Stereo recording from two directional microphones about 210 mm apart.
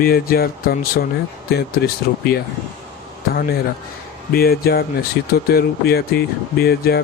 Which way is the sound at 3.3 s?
45° left (ahead or behind).